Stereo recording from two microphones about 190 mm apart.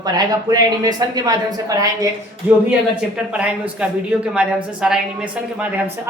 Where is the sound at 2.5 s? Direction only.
10° right (ahead or behind).